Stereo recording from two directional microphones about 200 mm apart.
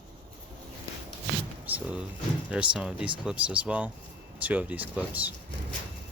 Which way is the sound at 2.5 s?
5° right (ahead or behind).